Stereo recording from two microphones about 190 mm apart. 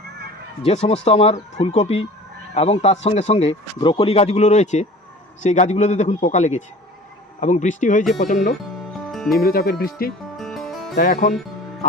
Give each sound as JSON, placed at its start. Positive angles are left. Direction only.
{"t": 0.6, "sound": "speech", "side_deg": 35}
{"t": 8.9, "sound": "music", "side_deg": 0}
{"t": 9.3, "sound": "speech", "side_deg": 50}
{"t": 10.3, "sound": "music", "side_deg": 0}
{"t": 10.9, "sound": "speech", "side_deg": 45}